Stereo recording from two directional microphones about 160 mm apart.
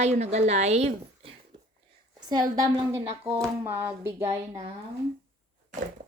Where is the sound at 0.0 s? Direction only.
45° right (ahead or behind).